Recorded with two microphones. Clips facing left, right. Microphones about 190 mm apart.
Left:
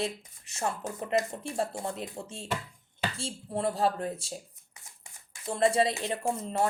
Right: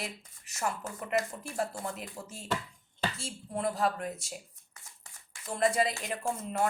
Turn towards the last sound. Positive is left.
turn(degrees=30)  # may be behind; listen again after turning